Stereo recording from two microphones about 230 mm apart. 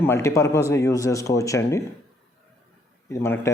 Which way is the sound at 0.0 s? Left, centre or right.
Centre.